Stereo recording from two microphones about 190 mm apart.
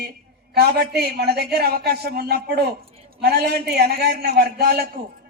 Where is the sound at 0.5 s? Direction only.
55° right (ahead or behind).